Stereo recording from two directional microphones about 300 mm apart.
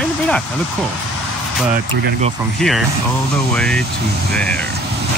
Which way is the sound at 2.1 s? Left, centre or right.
Right.